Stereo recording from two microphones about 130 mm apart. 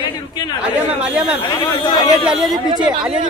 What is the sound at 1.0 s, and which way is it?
Speech, 10° right (ahead or behind).